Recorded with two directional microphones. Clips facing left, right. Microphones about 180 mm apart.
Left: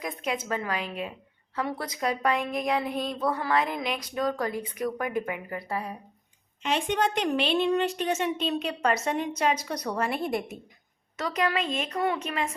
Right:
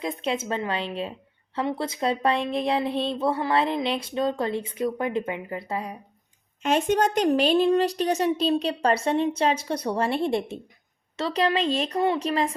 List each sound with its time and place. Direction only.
0.0 s speech: 25° right (ahead or behind)
6.6 s a woman's voice: 45° right (ahead or behind)